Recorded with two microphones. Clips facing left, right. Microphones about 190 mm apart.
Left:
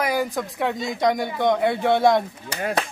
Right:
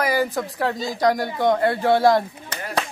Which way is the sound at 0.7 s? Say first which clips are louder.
Even; 30° right (ahead or behind).